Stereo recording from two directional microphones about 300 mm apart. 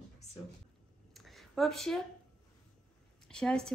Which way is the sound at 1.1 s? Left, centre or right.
Centre.